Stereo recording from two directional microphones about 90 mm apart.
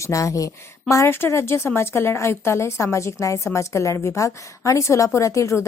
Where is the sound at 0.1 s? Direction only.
35° left (ahead or behind).